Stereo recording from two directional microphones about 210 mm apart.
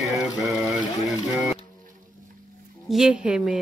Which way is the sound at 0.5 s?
Centre (ahead or behind).